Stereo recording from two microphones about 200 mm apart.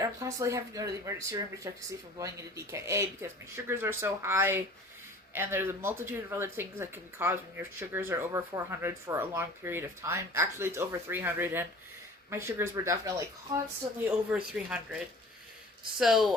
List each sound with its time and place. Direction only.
0.0 s speech: 15° right (ahead or behind)
14.3 s speech: 5° right (ahead or behind)